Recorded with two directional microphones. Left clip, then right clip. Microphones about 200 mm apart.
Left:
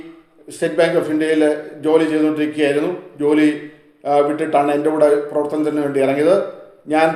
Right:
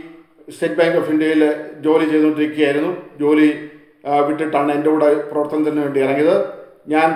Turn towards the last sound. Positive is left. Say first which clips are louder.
# even
turn(degrees=20)  # may be behind; listen again after turning